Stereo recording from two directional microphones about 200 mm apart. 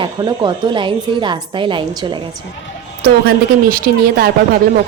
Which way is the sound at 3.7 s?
50° right (ahead or behind).